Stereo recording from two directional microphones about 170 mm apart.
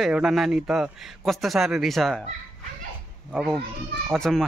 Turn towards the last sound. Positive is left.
turn(degrees=0)  # may be behind; listen again after turning